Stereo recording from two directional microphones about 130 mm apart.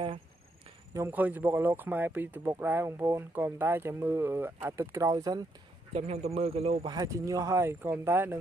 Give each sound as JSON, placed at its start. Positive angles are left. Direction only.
{"t": 0.9, "sound": "speech", "side_deg": -15}
{"t": 5.9, "sound": "speech", "side_deg": -50}
{"t": 6.9, "sound": "speech", "side_deg": -25}